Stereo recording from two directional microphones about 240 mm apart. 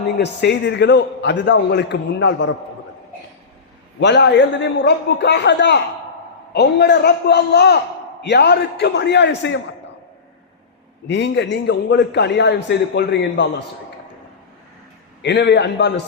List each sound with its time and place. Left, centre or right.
0.2 s a man's voice: left
4.0 s a man's voice: left
11.1 s a man's voice: left
15.2 s a man's voice: left